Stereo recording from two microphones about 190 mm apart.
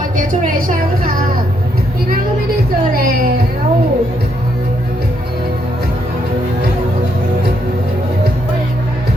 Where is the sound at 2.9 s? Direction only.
50° right (ahead or behind).